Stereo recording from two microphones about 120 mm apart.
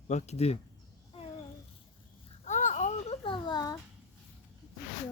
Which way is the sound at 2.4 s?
90° left.